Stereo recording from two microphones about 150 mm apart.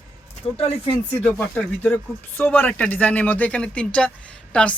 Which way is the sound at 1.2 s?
10° left (ahead or behind).